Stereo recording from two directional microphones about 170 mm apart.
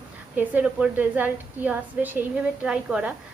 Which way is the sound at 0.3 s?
10° right (ahead or behind).